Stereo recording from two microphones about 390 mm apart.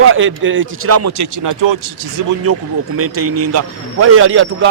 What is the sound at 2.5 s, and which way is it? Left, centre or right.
A man's voice, right.